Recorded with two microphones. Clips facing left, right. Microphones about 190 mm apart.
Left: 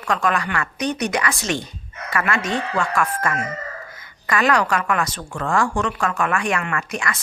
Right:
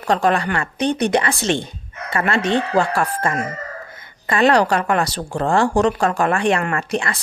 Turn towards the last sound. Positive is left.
turn(degrees=-35)  # may be behind; listen again after turning